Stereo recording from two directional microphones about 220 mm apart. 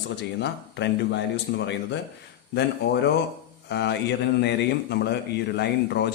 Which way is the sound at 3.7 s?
50° left (ahead or behind).